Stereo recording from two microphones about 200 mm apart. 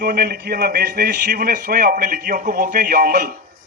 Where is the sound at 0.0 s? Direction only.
50° right (ahead or behind).